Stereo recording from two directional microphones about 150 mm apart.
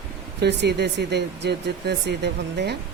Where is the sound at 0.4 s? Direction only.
90° right.